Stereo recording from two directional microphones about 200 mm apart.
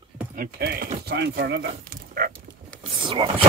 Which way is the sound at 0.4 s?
50° right (ahead or behind).